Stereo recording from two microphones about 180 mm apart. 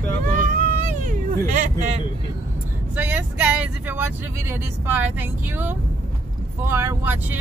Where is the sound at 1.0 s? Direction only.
45° right (ahead or behind).